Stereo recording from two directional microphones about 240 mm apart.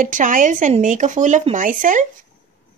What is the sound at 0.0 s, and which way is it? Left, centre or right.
Speech, right.